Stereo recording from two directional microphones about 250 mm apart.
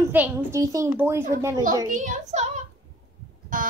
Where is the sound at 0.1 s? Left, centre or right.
Centre.